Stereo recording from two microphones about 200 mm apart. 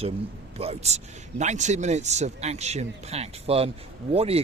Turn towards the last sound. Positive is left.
turn(degrees=-30)  # may be behind; listen again after turning